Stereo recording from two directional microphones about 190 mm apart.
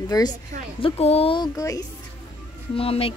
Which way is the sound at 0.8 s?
30° left (ahead or behind).